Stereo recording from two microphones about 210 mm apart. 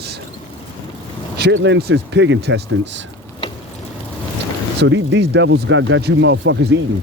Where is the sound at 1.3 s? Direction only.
55° right (ahead or behind).